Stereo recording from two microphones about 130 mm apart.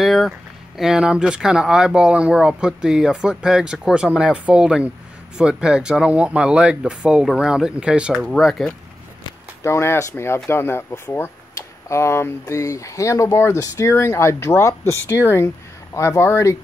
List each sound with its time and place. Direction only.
0.0 s speech: centre (ahead or behind)
9.6 s speech: 20° left (ahead or behind)